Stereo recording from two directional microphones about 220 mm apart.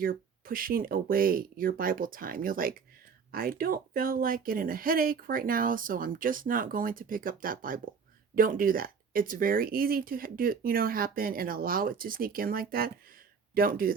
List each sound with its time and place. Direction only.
0.0 s speech: 40° right (ahead or behind)